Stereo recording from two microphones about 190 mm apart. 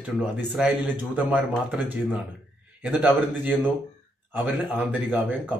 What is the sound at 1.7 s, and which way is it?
A man's voice, 5° right (ahead or behind).